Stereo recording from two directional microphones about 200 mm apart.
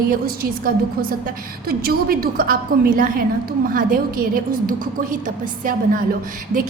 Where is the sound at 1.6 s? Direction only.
50° right (ahead or behind).